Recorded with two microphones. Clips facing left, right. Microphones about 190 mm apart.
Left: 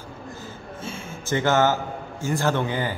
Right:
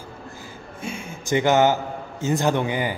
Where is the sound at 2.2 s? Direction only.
20° right (ahead or behind).